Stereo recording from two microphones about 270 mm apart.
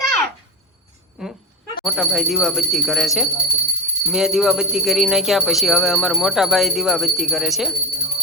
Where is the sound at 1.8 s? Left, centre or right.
Centre.